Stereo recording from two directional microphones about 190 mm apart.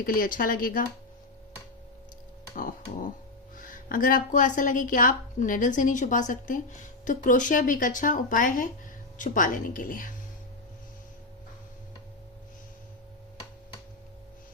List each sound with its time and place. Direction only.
0.0 s a woman's voice: 50° left (ahead or behind)
2.6 s a woman's voice: 45° left (ahead or behind)